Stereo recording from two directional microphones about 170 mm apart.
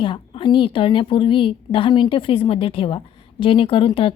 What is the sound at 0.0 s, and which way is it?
A woman's voice, 30° left (ahead or behind).